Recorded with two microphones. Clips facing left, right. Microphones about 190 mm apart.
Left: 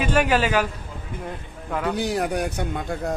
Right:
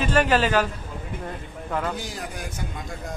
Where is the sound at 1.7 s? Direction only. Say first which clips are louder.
Left 2 dB; centre (ahead or behind).